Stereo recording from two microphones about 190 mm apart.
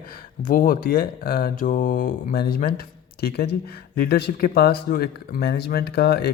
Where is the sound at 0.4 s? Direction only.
45° left (ahead or behind).